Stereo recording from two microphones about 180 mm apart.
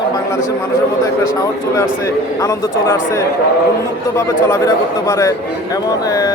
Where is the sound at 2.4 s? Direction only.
15° left (ahead or behind).